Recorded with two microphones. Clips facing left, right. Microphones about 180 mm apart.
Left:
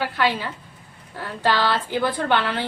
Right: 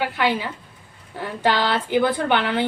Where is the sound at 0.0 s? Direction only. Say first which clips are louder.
Right 1 dB; 15° right (ahead or behind).